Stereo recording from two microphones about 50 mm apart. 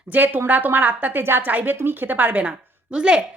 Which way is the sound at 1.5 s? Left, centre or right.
Right.